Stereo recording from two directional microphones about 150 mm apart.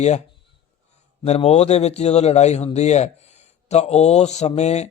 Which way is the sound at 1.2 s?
45° left (ahead or behind).